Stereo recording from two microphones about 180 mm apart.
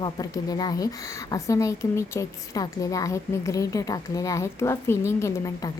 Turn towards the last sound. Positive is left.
turn(degrees=15)  # may be behind; listen again after turning